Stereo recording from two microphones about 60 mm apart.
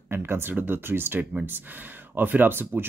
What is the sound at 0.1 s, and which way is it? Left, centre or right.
Speech, right.